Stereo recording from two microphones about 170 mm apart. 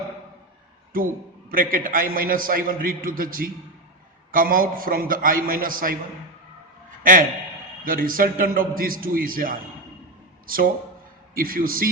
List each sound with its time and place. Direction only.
0.9 s a man's voice: 55° right (ahead or behind)
7.0 s a man's voice: 55° right (ahead or behind)